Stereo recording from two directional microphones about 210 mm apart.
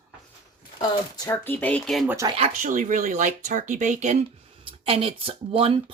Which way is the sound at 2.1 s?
25° right (ahead or behind).